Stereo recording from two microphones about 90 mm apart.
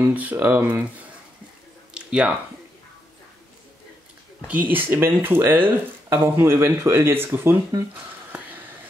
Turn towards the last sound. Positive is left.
turn(degrees=-25)  # may be behind; listen again after turning